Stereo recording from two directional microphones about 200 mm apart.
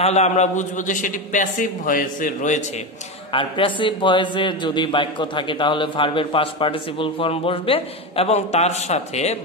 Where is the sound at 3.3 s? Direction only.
25° left (ahead or behind).